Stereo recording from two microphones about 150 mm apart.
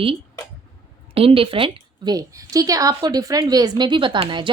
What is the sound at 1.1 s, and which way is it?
A woman's voice, 40° right (ahead or behind).